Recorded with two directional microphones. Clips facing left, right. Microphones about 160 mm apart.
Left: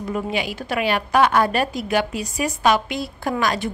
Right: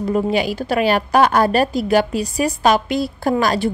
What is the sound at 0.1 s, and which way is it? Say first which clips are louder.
A woman's voice: right 6 dB; 35° right (ahead or behind).